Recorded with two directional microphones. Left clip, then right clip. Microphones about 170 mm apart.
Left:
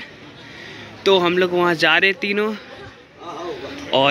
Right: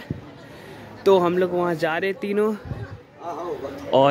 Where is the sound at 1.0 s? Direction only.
20° right (ahead or behind).